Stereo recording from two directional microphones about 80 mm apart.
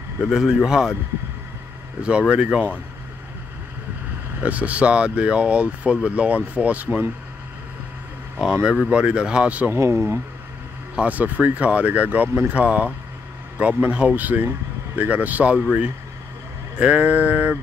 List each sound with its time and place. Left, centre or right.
0.2 s speech: centre
2.0 s speech: centre
4.4 s speech: centre
8.9 s speech: centre
9.7 s speech: right
11.0 s speech: centre